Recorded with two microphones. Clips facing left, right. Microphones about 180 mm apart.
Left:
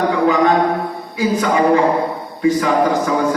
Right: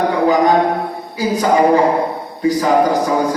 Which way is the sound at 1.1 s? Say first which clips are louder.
Right 2 dB; 35° right (ahead or behind).